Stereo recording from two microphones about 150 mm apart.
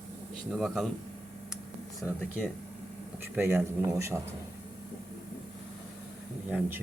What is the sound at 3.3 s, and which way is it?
Speech, 15° right (ahead or behind).